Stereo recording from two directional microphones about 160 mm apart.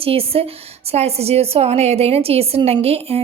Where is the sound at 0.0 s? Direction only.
35° right (ahead or behind).